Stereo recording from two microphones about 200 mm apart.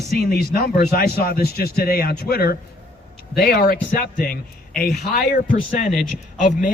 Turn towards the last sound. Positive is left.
turn(degrees=40)  # may be behind; listen again after turning